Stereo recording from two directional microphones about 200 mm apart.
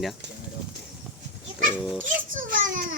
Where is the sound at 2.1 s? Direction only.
40° right (ahead or behind).